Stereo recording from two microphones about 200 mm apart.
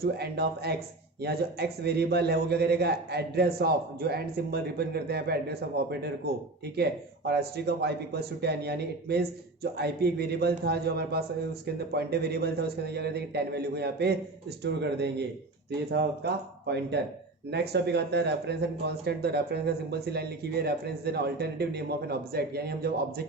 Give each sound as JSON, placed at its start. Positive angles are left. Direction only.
{"t": 0.0, "sound": "speech", "side_deg": -55}